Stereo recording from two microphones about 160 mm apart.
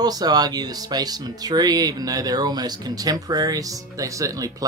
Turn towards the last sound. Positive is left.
turn(degrees=-20)  # may be behind; listen again after turning